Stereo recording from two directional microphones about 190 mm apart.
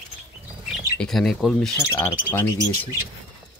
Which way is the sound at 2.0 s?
10° left (ahead or behind).